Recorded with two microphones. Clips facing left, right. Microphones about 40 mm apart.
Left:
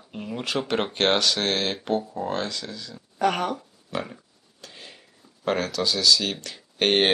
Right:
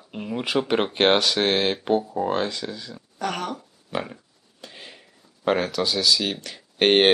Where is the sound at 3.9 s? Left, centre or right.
Centre.